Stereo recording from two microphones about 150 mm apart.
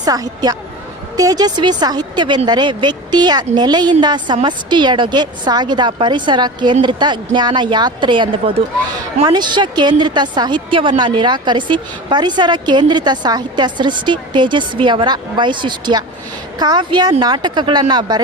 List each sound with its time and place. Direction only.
0.0 s a woman's voice: 25° right (ahead or behind)